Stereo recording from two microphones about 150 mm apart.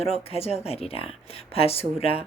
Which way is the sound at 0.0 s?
40° left (ahead or behind).